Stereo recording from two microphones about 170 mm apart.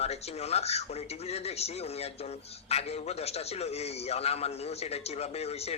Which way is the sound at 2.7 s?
40° left (ahead or behind).